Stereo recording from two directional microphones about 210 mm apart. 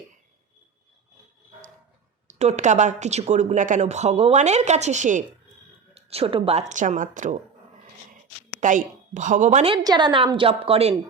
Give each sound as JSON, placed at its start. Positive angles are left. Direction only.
{"t": 2.2, "sound": "speech", "side_deg": -35}
{"t": 8.6, "sound": "a woman's voice", "side_deg": -35}